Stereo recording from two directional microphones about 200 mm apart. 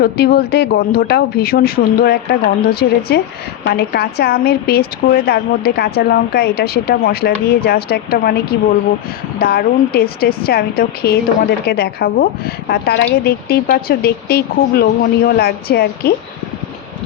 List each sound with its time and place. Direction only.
0.0 s a woman's voice: 50° left (ahead or behind)